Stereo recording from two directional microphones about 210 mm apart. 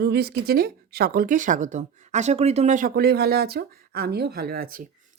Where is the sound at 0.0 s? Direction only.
50° right (ahead or behind).